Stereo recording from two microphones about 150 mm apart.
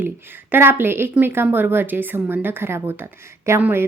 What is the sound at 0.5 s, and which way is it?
A woman's voice, 15° right (ahead or behind).